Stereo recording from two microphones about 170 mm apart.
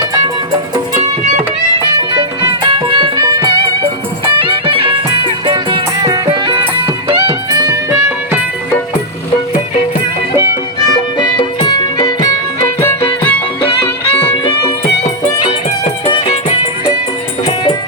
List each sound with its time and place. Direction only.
2.1 s music: 25° right (ahead or behind)
11.2 s music: 25° left (ahead or behind)
12.8 s music: 15° left (ahead or behind)